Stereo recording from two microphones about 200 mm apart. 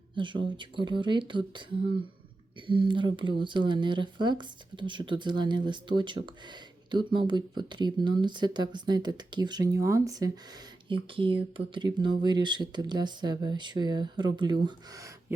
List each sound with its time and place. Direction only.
0.2 s speech: 25° right (ahead or behind)